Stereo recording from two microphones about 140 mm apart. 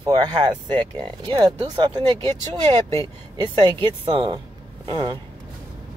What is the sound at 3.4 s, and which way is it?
Speech, 35° right (ahead or behind).